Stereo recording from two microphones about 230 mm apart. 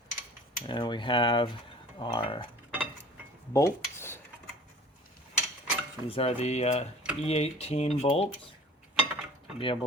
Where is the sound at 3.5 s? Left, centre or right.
Centre.